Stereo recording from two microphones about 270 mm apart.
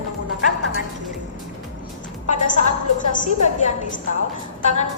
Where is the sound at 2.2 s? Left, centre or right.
Left.